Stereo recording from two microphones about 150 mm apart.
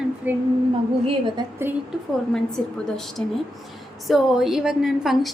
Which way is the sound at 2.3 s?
5° left (ahead or behind).